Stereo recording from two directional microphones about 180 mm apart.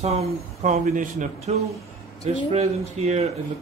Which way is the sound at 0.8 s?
45° right (ahead or behind).